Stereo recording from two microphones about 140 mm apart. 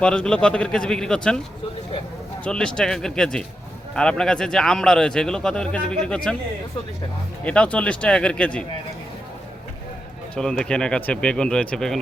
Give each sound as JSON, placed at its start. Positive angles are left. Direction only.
{"t": 0.0, "sound": "a man's voice", "side_deg": 5}
{"t": 2.4, "sound": "a man's voice", "side_deg": 5}
{"t": 7.4, "sound": "speech", "side_deg": 10}
{"t": 10.3, "sound": "speech", "side_deg": 5}